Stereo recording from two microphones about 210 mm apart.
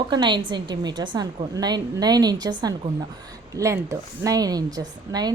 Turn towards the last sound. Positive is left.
turn(degrees=-20)  # may be behind; listen again after turning